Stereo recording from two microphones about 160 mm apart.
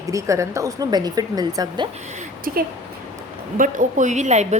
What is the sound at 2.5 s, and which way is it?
A woman's voice, 60° right (ahead or behind).